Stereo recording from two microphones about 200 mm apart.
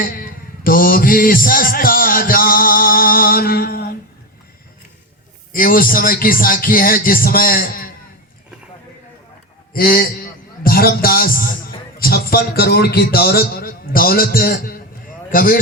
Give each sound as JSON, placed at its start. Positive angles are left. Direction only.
{"t": 0.0, "sound": "a man's voice", "side_deg": 45}
{"t": 5.5, "sound": "a man's voice", "side_deg": 45}
{"t": 9.7, "sound": "a man's voice", "side_deg": 50}